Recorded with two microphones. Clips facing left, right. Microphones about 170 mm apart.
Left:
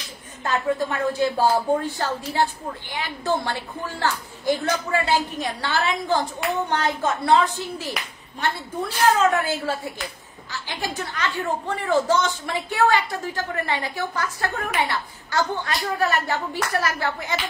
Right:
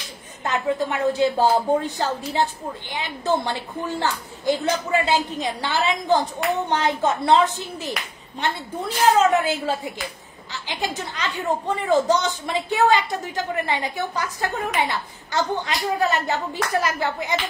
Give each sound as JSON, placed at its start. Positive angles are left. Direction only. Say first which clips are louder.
{"t": 0.4, "sound": "a woman's voice", "louder": "even", "side_deg": -20}